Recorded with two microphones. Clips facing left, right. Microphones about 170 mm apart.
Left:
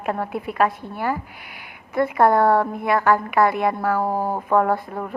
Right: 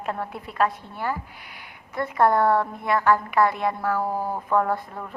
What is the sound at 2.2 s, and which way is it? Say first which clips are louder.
Speech: left 2 dB; 60° left (ahead or behind).